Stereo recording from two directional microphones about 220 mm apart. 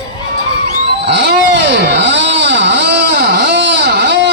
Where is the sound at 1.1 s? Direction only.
50° right (ahead or behind).